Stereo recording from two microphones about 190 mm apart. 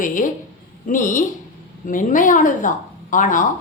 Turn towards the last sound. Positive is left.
turn(degrees=45)  # may be behind; listen again after turning